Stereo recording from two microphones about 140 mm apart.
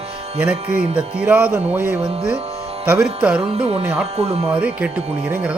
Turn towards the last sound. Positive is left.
turn(degrees=-10)  # may be behind; listen again after turning